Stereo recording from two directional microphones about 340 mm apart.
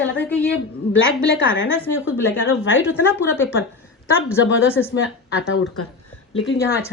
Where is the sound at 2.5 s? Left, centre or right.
Left.